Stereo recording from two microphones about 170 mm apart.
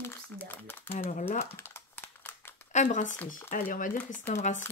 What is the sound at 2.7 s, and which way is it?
Speech, 45° left (ahead or behind).